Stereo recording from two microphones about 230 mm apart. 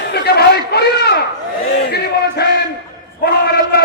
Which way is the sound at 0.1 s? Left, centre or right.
Left.